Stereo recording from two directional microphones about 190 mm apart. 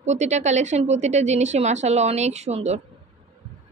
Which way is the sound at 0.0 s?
35° right (ahead or behind).